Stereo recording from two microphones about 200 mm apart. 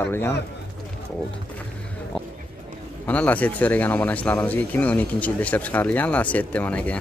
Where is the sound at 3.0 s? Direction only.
10° left (ahead or behind).